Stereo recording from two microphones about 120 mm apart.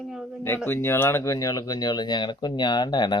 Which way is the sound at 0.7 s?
20° left (ahead or behind).